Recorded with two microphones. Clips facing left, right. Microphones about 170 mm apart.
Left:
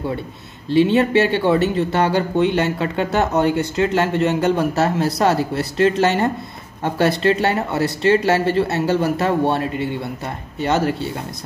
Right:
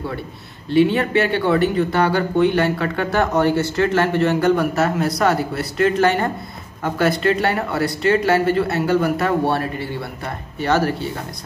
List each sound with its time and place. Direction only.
0.7 s speech: 25° left (ahead or behind)